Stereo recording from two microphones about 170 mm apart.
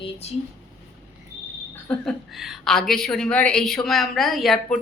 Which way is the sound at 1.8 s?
Centre (ahead or behind).